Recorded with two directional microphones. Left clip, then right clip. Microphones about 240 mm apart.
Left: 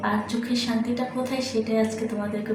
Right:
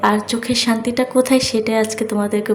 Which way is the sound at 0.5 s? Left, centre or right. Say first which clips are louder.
Right 9 dB; right.